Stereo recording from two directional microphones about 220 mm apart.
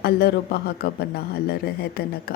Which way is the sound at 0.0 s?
45° left (ahead or behind).